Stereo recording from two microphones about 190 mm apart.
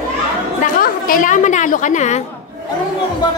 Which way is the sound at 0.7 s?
45° left (ahead or behind).